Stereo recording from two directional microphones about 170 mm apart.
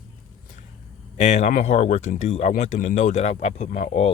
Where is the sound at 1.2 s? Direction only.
40° left (ahead or behind).